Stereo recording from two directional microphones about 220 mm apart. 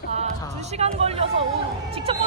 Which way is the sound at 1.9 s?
25° right (ahead or behind).